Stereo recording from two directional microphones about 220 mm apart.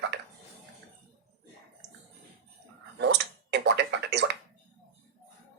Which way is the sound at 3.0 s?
50° right (ahead or behind).